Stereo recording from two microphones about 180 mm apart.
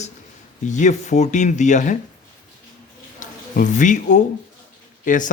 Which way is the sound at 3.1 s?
45° left (ahead or behind).